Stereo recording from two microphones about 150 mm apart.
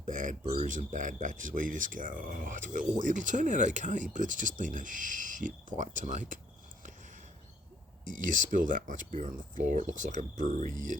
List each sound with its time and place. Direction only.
0.0 s speech: 60° right (ahead or behind)
8.0 s speech: 60° right (ahead or behind)